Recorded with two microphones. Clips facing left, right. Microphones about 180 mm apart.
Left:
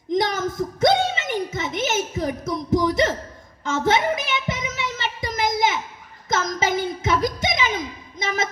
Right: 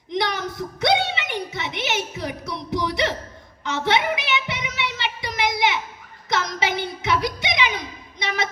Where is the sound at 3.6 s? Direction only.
45° left (ahead or behind).